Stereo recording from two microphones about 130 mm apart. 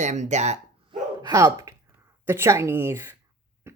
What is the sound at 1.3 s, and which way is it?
Speech, 25° right (ahead or behind).